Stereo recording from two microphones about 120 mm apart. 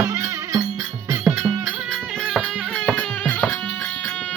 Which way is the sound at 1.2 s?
10° right (ahead or behind).